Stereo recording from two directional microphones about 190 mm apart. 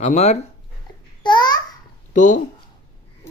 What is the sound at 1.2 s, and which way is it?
Babbling, 25° left (ahead or behind).